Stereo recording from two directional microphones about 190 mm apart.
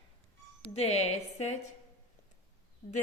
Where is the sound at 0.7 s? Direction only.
35° left (ahead or behind).